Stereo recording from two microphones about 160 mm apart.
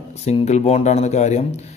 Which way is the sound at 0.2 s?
40° left (ahead or behind).